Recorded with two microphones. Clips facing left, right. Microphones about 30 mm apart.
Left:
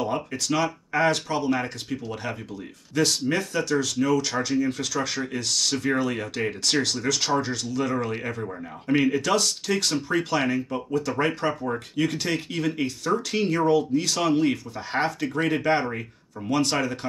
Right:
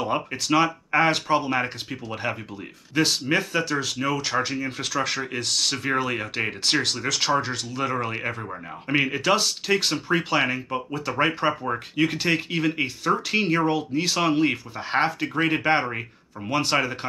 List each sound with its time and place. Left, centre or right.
0.0 s speech: right